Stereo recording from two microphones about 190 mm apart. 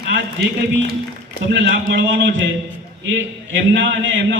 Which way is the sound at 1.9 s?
75° right (ahead or behind).